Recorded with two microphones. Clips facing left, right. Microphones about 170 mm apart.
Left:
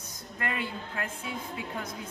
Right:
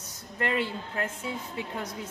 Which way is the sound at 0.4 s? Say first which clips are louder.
Right 5 dB; 30° right (ahead or behind).